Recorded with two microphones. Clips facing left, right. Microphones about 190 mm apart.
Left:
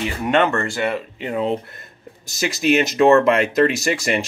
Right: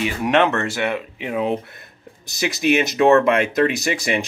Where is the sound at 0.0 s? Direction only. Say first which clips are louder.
Right 1 dB; centre (ahead or behind).